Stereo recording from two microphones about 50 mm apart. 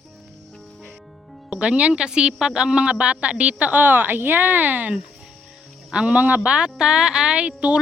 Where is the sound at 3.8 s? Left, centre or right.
Right.